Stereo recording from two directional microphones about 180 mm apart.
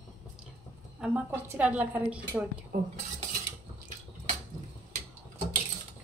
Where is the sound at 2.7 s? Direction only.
55° right (ahead or behind).